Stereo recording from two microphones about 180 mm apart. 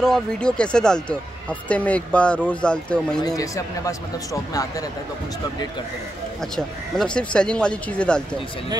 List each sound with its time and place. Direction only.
0.0 s speech: 5° left (ahead or behind)
3.2 s speech: 20° left (ahead or behind)
6.5 s speech: 5° left (ahead or behind)